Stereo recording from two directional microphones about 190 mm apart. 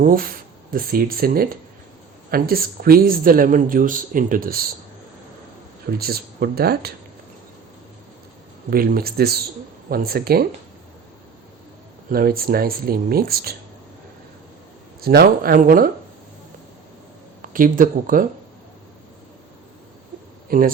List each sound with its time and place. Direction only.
0.0 s speech: 50° right (ahead or behind)
6.0 s speech: 55° right (ahead or behind)
8.7 s speech: 50° right (ahead or behind)
12.1 s speech: 50° right (ahead or behind)
15.0 s speech: 55° right (ahead or behind)
17.5 s speech: 45° right (ahead or behind)
20.5 s speech: 50° right (ahead or behind)